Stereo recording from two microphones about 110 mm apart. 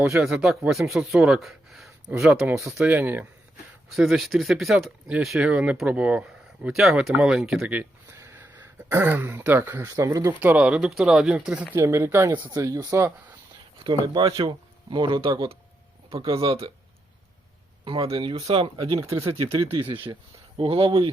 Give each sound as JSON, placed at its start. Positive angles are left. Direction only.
{"t": 0.0, "sound": "speech", "side_deg": -20}
{"t": 0.3, "sound": "speech", "side_deg": -10}
{"t": 2.7, "sound": "speech", "side_deg": -15}
{"t": 3.8, "sound": "speech", "side_deg": 0}
{"t": 8.2, "sound": "throat clearing", "side_deg": -20}
{"t": 9.8, "sound": "speech", "side_deg": -30}
{"t": 10.4, "sound": "speech", "side_deg": -10}
{"t": 11.7, "sound": "speech", "side_deg": -20}
{"t": 13.8, "sound": "speech", "side_deg": -40}
{"t": 17.8, "sound": "speech", "side_deg": -55}
{"t": 18.9, "sound": "speech", "side_deg": -25}
{"t": 19.9, "sound": "speech", "side_deg": -50}